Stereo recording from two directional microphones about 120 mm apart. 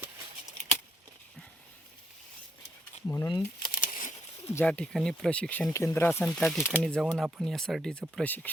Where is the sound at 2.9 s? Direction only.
70° left (ahead or behind).